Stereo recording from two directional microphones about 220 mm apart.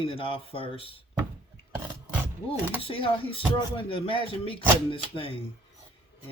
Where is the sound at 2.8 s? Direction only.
25° left (ahead or behind).